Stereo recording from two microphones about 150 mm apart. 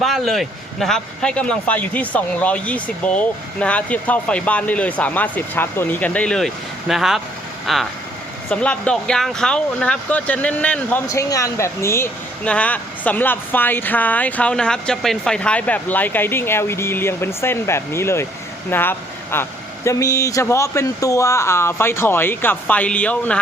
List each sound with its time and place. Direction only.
0.0 s speech: centre (ahead or behind)